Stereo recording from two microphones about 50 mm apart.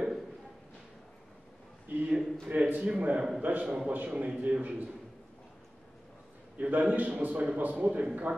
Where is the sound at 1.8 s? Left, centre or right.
Right.